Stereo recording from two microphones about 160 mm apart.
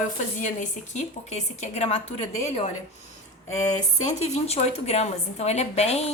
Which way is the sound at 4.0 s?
45° left (ahead or behind).